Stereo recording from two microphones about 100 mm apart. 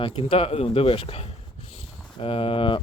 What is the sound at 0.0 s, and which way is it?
Speech, 70° left (ahead or behind).